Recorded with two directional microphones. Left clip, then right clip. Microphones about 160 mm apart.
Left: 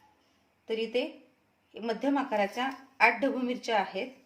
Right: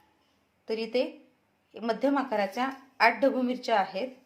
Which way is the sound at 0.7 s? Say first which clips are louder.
Right 2 dB; 30° right (ahead or behind).